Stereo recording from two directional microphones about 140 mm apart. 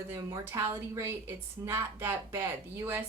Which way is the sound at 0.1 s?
20° right (ahead or behind).